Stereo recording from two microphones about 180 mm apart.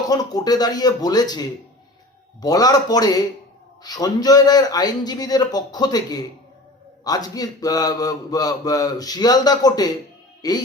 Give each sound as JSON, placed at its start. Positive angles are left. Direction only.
{"t": 0.1, "sound": "a man's voice", "side_deg": 20}